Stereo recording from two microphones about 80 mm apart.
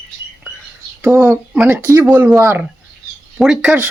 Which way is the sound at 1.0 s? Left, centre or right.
Right.